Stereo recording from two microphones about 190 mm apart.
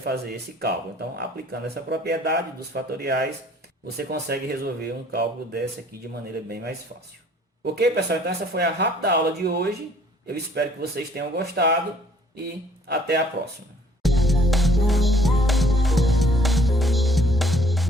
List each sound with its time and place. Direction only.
0.0 s speech: 55° right (ahead or behind)
12.9 s speech: 60° right (ahead or behind)
14.0 s music: centre (ahead or behind)